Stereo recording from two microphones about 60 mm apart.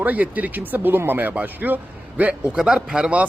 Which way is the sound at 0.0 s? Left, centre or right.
Right.